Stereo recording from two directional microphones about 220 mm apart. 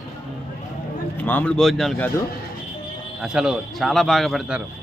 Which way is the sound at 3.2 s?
5° right (ahead or behind).